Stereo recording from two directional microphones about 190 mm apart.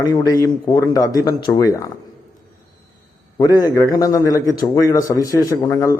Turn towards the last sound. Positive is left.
turn(degrees=15)  # may be behind; listen again after turning